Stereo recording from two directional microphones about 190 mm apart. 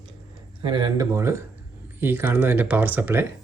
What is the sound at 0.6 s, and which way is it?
Speech, 25° right (ahead or behind).